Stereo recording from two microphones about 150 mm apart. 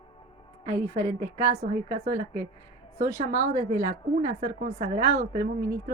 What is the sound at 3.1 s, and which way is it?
A woman's voice, 55° right (ahead or behind).